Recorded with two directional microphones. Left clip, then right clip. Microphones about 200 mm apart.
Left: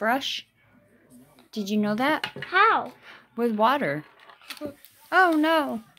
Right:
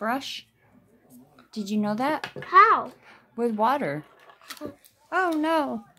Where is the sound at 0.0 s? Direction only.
5° left (ahead or behind).